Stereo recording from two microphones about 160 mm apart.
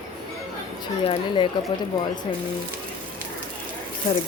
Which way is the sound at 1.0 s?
35° left (ahead or behind).